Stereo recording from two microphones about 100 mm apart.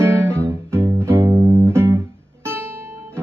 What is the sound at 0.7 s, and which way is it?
Music, 25° right (ahead or behind).